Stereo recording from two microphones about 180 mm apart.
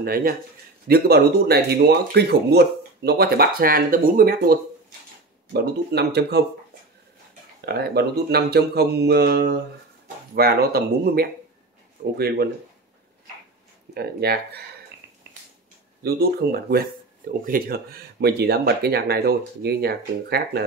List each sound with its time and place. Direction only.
0.0 s speech: 55° right (ahead or behind)
7.6 s speech: 65° right (ahead or behind)
13.9 s speech: 60° right (ahead or behind)
16.0 s speech: 60° right (ahead or behind)